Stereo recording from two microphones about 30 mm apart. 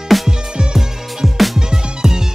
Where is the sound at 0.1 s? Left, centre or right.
Centre.